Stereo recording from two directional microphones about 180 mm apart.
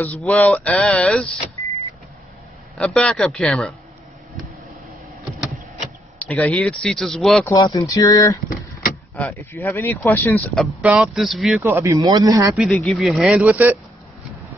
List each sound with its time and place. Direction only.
0.0 s speech: 10° left (ahead or behind)
2.8 s speech: 5° left (ahead or behind)
6.1 s speech: 10° left (ahead or behind)
7.4 s speech: 25° left (ahead or behind)
10.6 s speech: 5° right (ahead or behind)
11.6 s speech: 15° right (ahead or behind)
12.5 s speech: 5° left (ahead or behind)